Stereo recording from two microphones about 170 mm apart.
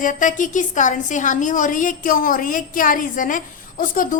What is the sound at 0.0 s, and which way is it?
A woman's voice, 50° left (ahead or behind).